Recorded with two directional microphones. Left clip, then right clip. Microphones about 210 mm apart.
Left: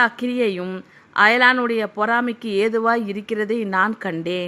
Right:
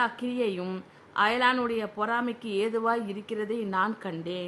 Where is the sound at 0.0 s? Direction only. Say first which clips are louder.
Left 9 dB; 20° left (ahead or behind).